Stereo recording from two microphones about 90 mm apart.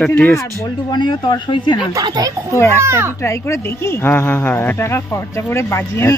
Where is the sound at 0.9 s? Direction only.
55° left (ahead or behind).